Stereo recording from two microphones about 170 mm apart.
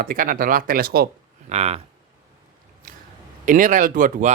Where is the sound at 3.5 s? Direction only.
50° right (ahead or behind).